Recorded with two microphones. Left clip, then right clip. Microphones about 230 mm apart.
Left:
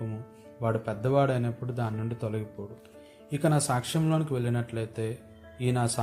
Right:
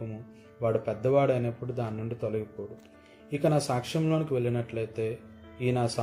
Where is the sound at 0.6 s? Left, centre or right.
Left.